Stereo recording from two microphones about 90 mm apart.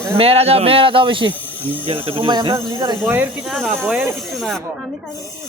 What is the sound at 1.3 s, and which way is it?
Speech, 20° left (ahead or behind).